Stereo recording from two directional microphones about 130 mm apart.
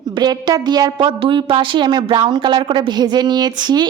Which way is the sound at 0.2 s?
30° right (ahead or behind).